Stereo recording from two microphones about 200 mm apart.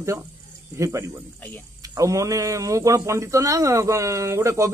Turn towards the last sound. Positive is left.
turn(degrees=-15)  # may be behind; listen again after turning